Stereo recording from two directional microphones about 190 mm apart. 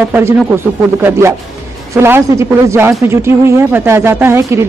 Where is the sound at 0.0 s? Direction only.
10° right (ahead or behind).